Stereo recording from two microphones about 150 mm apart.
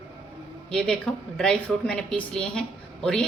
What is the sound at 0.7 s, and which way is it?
Speech, 5° left (ahead or behind).